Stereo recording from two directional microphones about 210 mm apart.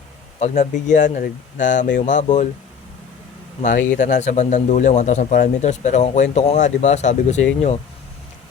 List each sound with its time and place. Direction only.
0.3 s speech: 35° left (ahead or behind)
3.6 s speech: 35° left (ahead or behind)